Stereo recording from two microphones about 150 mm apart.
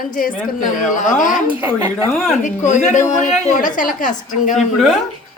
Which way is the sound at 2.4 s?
55° left (ahead or behind).